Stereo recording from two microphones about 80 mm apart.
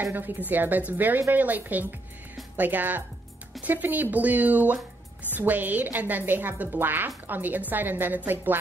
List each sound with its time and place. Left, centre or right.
0.0 s speech: right